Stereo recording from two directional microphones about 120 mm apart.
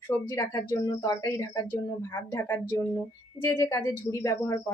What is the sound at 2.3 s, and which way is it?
Speech, 15° left (ahead or behind).